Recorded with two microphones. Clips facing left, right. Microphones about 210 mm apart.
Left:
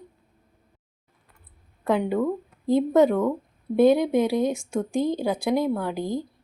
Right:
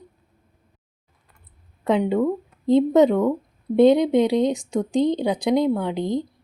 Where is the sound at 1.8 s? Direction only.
20° right (ahead or behind).